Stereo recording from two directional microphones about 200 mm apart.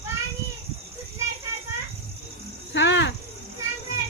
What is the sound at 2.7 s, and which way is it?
Cricket, 65° left (ahead or behind).